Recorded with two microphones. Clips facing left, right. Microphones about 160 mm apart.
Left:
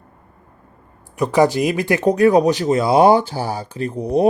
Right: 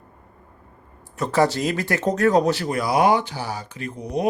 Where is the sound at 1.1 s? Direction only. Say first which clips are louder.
Left 5 dB; 15° left (ahead or behind).